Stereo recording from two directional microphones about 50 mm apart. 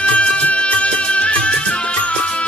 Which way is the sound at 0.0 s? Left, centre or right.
Left.